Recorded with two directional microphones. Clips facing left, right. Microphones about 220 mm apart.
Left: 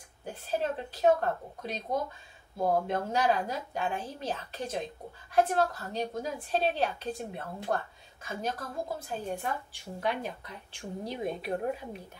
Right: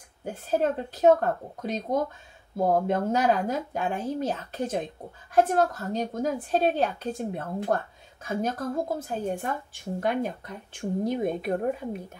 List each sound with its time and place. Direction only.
0.2 s a woman's voice: 50° right (ahead or behind)